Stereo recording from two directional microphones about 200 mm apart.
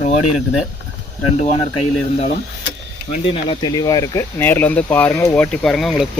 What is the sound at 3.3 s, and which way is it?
A man's voice, 20° left (ahead or behind).